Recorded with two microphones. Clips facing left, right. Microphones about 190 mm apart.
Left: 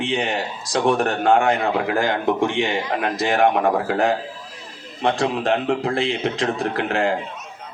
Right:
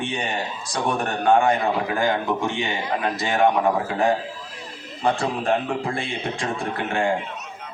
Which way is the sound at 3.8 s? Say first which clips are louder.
Left 2 dB; 75° left (ahead or behind).